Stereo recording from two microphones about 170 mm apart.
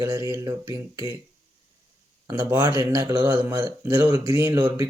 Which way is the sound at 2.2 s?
20° right (ahead or behind).